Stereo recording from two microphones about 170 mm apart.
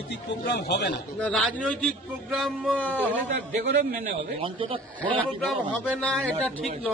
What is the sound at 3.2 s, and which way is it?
Speech, 45° right (ahead or behind).